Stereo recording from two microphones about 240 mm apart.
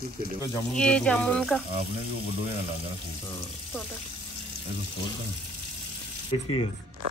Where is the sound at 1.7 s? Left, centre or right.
Right.